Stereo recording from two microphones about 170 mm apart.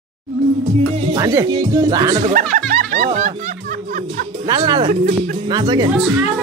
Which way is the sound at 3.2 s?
45° right (ahead or behind).